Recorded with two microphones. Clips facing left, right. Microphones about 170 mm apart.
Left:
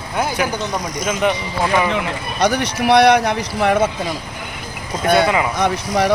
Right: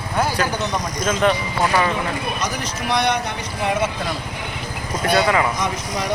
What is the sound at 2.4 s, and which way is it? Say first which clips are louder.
Speech: left 8 dB; 70° left (ahead or behind).